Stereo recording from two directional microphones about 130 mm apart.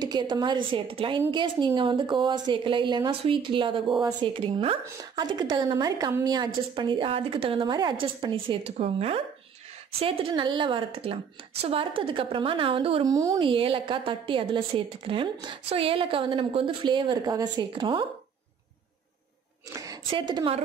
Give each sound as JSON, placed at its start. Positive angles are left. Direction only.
{"t": 0.0, "sound": "a woman's voice", "side_deg": -35}
{"t": 7.7, "sound": "a woman's voice", "side_deg": -30}
{"t": 8.6, "sound": "a woman's voice", "side_deg": -50}
{"t": 13.0, "sound": "speech", "side_deg": -25}
{"t": 13.4, "sound": "a woman's voice", "side_deg": -45}
{"t": 20.1, "sound": "a woman's voice", "side_deg": -40}